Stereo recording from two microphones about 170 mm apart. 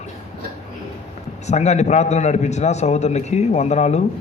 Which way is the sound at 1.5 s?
40° left (ahead or behind).